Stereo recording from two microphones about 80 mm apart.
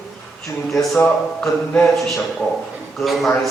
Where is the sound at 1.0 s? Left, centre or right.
Centre.